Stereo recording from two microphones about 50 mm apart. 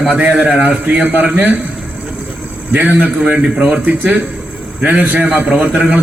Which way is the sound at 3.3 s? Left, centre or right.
Right.